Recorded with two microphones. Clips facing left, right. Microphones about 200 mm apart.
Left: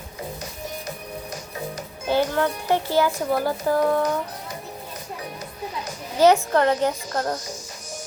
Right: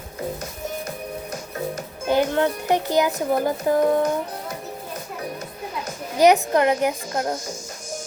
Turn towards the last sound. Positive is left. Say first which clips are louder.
# right 1 dB
turn(degrees=-10)  # may be behind; listen again after turning